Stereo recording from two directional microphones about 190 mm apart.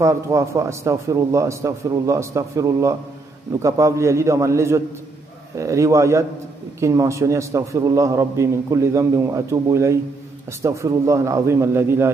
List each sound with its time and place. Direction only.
0.0 s a man's voice: 15° right (ahead or behind)